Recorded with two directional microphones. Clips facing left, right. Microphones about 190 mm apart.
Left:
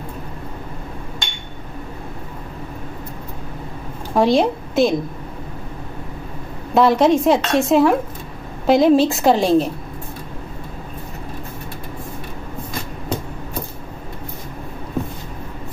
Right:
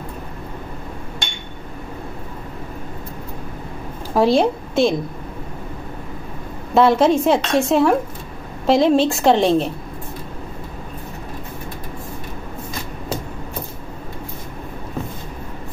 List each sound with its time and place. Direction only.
4.1 s a woman's voice: centre (ahead or behind)
6.7 s a woman's voice: centre (ahead or behind)